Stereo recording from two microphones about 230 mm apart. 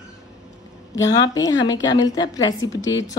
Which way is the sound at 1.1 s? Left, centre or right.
Centre.